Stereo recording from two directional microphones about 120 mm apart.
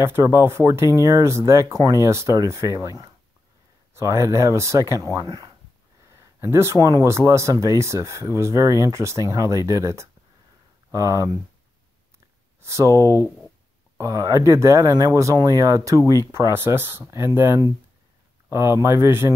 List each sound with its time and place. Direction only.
0.0 s speech: 20° right (ahead or behind)
12.6 s speech: 25° right (ahead or behind)